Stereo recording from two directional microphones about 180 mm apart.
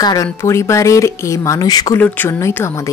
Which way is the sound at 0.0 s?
20° left (ahead or behind).